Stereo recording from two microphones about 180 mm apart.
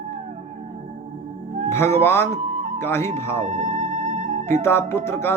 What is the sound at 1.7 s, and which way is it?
Music, 15° left (ahead or behind).